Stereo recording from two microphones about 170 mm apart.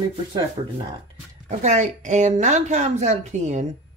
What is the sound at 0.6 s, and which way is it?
Speech, 25° right (ahead or behind).